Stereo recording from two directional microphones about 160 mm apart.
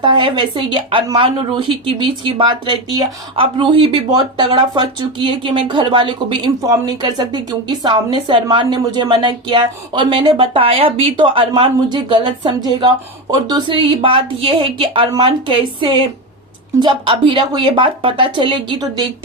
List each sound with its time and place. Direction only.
0.0 s speech: 30° right (ahead or behind)